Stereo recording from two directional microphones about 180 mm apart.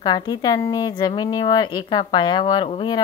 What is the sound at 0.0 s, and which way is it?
A woman's voice, 20° left (ahead or behind).